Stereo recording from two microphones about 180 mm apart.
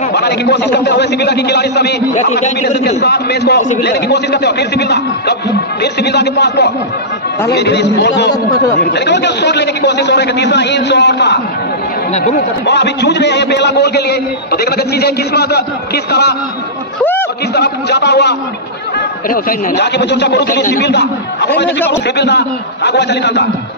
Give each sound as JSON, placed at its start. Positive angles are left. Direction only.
{"t": 0.1, "sound": "a man's voice", "side_deg": 70}
{"t": 3.0, "sound": "a man's voice", "side_deg": 65}
{"t": 12.1, "sound": "speech", "side_deg": 40}
{"t": 12.6, "sound": "a man's voice", "side_deg": 70}
{"t": 17.6, "sound": "a man's voice", "side_deg": 70}